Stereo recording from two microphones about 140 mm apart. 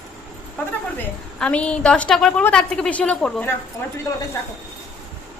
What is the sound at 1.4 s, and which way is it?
A woman's voice, 5° left (ahead or behind).